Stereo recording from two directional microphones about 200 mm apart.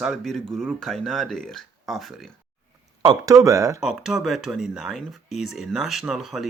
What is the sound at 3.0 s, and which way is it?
Speech, 20° right (ahead or behind).